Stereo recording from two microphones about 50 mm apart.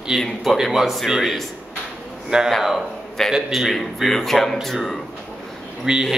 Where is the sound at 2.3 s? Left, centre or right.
Centre.